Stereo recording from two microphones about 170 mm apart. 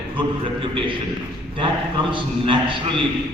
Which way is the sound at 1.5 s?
30° right (ahead or behind).